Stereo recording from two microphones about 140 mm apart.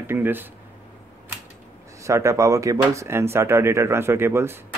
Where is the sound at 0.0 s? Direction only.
15° right (ahead or behind).